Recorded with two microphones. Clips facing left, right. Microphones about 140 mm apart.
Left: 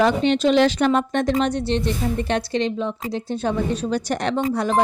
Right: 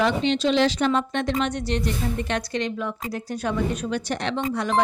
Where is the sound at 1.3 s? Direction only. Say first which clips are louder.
Left 4 dB; 35° left (ahead or behind).